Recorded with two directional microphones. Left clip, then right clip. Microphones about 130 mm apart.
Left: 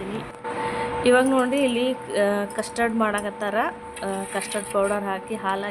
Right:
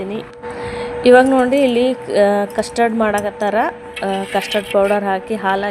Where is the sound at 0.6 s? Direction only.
35° right (ahead or behind).